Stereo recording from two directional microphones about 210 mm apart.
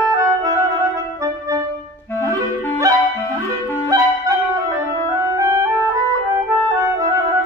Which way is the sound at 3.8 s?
15° right (ahead or behind).